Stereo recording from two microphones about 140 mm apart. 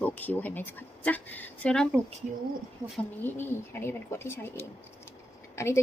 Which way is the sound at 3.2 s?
15° left (ahead or behind).